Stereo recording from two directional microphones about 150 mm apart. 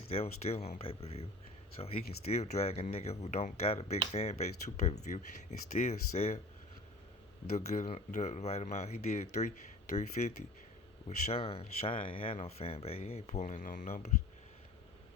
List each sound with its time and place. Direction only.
0.1 s speech: 40° left (ahead or behind)
7.5 s speech: 50° left (ahead or behind)